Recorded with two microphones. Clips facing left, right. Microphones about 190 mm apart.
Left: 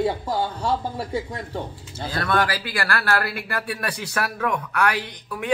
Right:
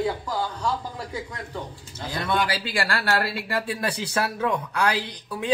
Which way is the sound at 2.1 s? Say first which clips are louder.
Left 2 dB; 20° right (ahead or behind).